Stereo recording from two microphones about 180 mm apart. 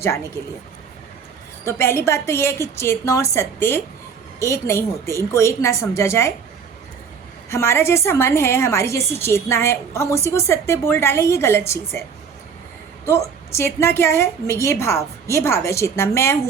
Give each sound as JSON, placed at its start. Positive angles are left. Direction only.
{"t": 1.6, "sound": "a woman's voice", "side_deg": 15}
{"t": 7.5, "sound": "a woman's voice", "side_deg": 15}
{"t": 13.1, "sound": "a woman's voice", "side_deg": 15}